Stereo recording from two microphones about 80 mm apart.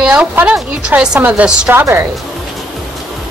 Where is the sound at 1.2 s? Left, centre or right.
Right.